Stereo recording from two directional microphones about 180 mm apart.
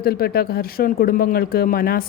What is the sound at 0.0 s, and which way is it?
Speech, 60° left (ahead or behind).